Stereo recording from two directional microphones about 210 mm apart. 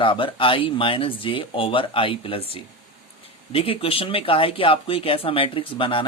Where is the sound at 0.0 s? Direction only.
25° left (ahead or behind).